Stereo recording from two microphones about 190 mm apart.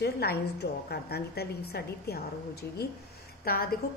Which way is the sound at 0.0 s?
60° left (ahead or behind).